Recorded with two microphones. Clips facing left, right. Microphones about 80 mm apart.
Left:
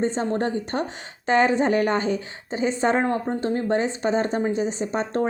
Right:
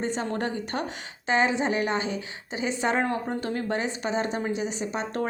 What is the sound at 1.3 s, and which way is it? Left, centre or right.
A woman's voice, left.